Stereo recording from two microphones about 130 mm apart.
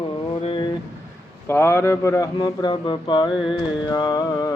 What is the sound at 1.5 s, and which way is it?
Mantra, 20° left (ahead or behind).